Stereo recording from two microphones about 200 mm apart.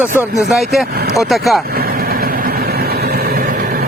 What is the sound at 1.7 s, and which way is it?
Vehicle, 50° right (ahead or behind).